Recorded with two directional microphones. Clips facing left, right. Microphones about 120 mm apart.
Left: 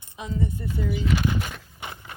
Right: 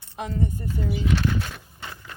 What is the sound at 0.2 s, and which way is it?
Speech, 55° right (ahead or behind).